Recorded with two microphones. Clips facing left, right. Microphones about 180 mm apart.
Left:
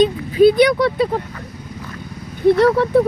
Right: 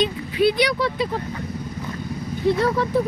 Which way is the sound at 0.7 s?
60° left (ahead or behind).